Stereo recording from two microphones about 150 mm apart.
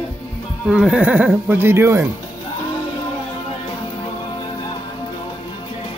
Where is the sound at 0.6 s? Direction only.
5° right (ahead or behind).